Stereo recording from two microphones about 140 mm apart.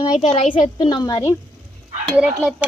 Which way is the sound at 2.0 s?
10° right (ahead or behind).